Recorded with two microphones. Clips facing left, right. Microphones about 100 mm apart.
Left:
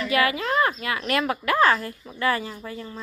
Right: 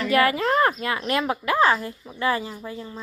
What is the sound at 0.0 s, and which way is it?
Speech, 40° right (ahead or behind).